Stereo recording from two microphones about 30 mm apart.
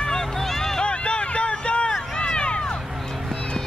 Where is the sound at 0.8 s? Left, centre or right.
Left.